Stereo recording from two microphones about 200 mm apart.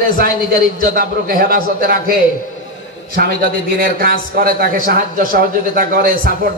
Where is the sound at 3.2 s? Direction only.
50° right (ahead or behind).